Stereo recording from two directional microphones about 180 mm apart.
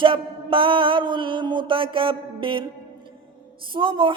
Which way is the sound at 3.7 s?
30° right (ahead or behind).